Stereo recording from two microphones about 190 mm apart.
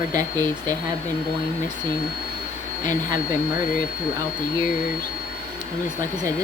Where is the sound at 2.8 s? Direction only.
20° right (ahead or behind).